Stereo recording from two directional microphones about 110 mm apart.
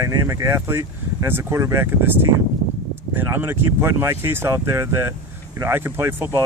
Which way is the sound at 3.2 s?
20° right (ahead or behind).